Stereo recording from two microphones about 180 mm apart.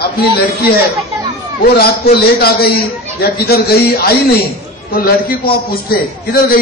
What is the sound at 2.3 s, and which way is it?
Speech, 60° left (ahead or behind).